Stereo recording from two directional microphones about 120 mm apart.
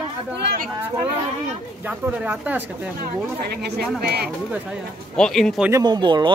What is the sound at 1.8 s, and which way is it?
Speech, 15° right (ahead or behind).